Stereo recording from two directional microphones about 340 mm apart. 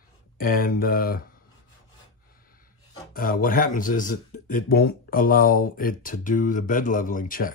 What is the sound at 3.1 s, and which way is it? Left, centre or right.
Speech, left.